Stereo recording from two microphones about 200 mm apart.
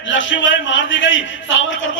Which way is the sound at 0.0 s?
70° left (ahead or behind).